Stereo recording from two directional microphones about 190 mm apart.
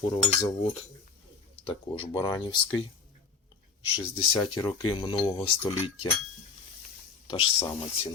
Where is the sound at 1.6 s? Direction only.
25° left (ahead or behind).